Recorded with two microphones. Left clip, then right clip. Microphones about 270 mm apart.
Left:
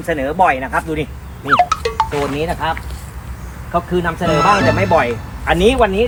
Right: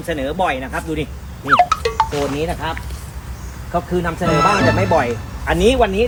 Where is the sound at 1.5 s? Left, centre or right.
Centre.